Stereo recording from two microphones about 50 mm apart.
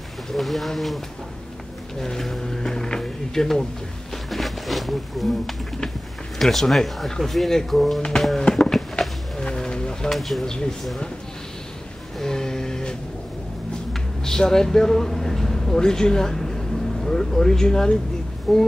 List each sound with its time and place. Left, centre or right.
0.3 s speech: centre
4.3 s wild animals: centre
6.3 s speech: centre
8.4 s a sound: centre
9.4 s bird: centre
10.0 s speech: centre
10.4 s speech: centre
12.2 s a sound: centre
14.2 s a man's voice: centre
18.5 s speech: centre